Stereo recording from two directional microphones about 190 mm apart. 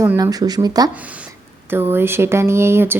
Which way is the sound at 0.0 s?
15° right (ahead or behind).